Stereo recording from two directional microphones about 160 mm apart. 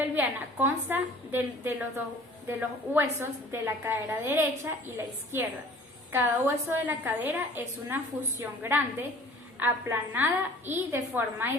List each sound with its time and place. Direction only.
0.2 s a woman's voice: 10° right (ahead or behind)